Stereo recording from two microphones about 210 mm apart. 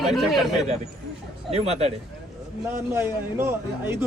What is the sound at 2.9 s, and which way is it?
Speech, 10° right (ahead or behind).